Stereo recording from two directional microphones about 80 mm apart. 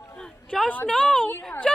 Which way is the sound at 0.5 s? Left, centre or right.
Centre.